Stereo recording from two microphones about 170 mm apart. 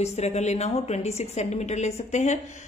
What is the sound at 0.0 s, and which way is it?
A woman's voice, 40° left (ahead or behind).